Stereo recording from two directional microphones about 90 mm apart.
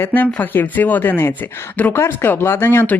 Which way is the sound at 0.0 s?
20° left (ahead or behind).